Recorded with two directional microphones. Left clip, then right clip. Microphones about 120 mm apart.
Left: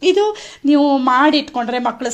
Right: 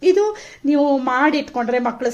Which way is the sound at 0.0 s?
15° left (ahead or behind).